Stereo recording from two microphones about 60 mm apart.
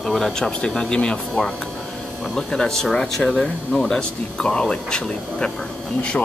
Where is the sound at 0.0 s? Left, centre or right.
Centre.